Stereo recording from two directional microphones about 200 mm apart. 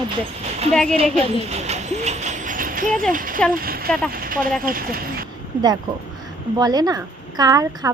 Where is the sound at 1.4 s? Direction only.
35° right (ahead or behind).